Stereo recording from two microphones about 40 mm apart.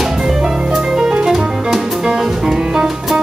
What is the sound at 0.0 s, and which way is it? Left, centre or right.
Music, centre.